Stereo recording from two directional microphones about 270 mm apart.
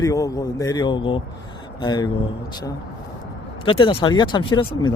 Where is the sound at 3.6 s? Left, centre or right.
Centre.